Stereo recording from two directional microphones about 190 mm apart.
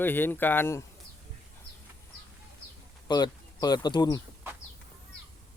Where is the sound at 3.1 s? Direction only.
20° left (ahead or behind).